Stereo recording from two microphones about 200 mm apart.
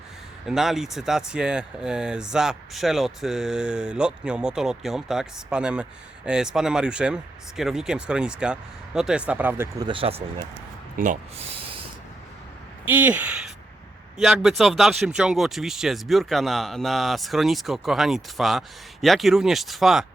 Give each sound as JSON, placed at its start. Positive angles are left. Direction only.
{"t": 0.4, "sound": "speech", "side_deg": 0}
{"t": 10.9, "sound": "speech", "side_deg": -40}
{"t": 12.8, "sound": "speech", "side_deg": -10}